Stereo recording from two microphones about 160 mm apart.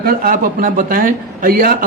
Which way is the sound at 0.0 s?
65° right (ahead or behind).